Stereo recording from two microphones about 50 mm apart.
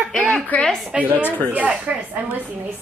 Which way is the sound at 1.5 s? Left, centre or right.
Right.